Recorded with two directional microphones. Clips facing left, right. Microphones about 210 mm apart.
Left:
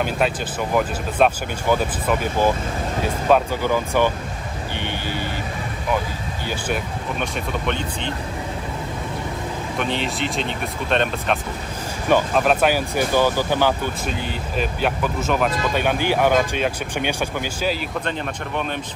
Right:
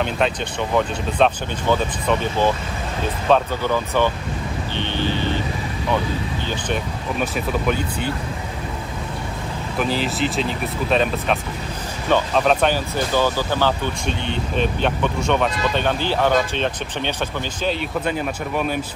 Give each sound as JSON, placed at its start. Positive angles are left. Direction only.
{"t": 0.0, "sound": "speech", "side_deg": 5}
{"t": 4.7, "sound": "vehicle", "side_deg": 10}
{"t": 7.2, "sound": "speech", "side_deg": -5}
{"t": 9.8, "sound": "speech", "side_deg": 0}